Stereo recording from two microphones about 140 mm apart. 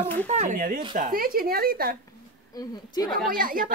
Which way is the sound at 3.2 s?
90° right.